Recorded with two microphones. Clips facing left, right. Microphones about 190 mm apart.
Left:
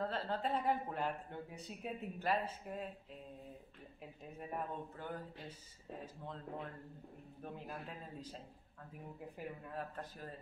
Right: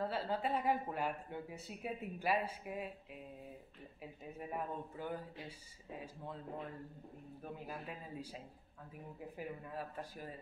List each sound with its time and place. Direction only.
0.0 s speech: 10° right (ahead or behind)
4.0 s speech: 5° right (ahead or behind)
9.4 s speech: 5° right (ahead or behind)